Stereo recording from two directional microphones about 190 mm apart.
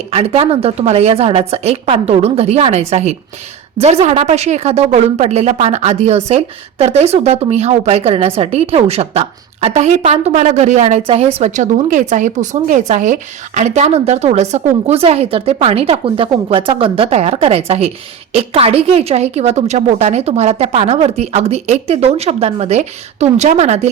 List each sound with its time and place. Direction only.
0.1 s a woman's voice: 30° right (ahead or behind)